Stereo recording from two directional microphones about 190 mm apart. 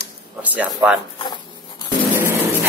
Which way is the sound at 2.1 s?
10° right (ahead or behind).